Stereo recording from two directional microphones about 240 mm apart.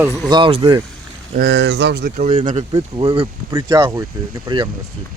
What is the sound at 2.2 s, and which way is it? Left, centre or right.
Speech, right.